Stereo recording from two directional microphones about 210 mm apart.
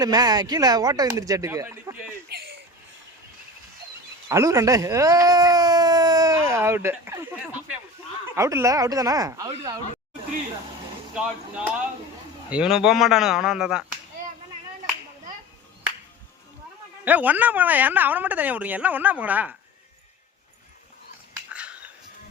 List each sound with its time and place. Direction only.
0.0 s speech: 20° right (ahead or behind)
2.3 s a sound: 50° right (ahead or behind)
4.3 s speech: 15° right (ahead or behind)
8.4 s speech: 15° right (ahead or behind)
11.1 s speech: 5° right (ahead or behind)
17.1 s speech: 5° right (ahead or behind)
21.5 s a sound: 5° right (ahead or behind)